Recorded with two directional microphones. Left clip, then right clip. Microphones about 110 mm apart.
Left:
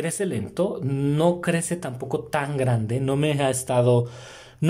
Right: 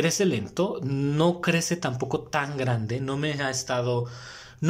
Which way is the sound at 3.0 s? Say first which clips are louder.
Left 8 dB; 20° left (ahead or behind).